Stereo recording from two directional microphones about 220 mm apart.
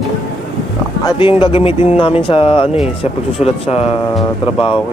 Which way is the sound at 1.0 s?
20° left (ahead or behind).